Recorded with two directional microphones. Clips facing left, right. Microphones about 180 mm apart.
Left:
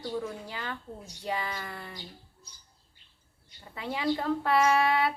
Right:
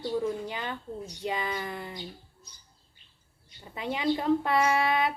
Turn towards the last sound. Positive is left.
turn(degrees=-20)  # may be behind; listen again after turning